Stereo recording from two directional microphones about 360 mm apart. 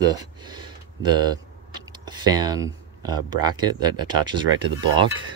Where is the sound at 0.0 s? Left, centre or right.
Centre.